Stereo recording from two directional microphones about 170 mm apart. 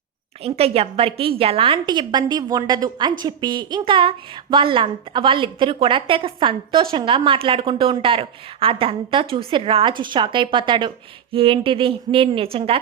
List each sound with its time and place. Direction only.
0.4 s a woman's voice: 35° right (ahead or behind)